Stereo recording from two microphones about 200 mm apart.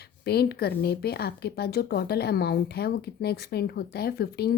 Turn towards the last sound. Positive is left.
turn(degrees=50)  # may be behind; listen again after turning